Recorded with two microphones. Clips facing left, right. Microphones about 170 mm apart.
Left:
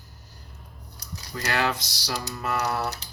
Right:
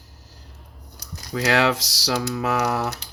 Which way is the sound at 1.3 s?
90° right.